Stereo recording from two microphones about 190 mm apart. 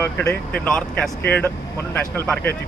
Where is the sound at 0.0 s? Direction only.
10° left (ahead or behind).